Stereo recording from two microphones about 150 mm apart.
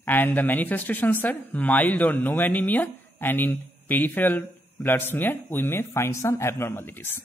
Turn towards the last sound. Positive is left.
turn(degrees=15)  # may be behind; listen again after turning